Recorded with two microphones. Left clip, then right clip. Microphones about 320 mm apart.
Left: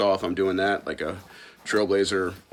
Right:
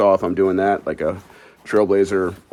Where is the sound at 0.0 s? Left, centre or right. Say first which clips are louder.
Right 7 dB; centre.